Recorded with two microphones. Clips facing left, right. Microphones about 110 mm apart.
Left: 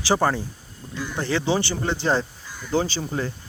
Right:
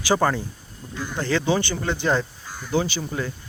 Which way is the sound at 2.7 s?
35° left (ahead or behind).